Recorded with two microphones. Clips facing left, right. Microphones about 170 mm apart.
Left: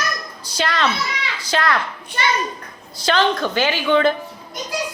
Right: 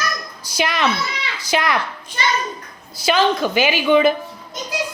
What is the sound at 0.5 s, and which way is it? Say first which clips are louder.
A woman's voice: right 1 dB; 15° right (ahead or behind).